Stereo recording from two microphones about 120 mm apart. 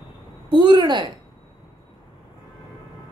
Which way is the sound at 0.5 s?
40° right (ahead or behind).